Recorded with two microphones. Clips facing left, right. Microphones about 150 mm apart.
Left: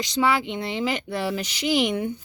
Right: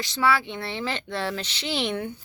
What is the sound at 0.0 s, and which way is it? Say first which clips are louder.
A woman's voice: left 1 dB; 15° left (ahead or behind).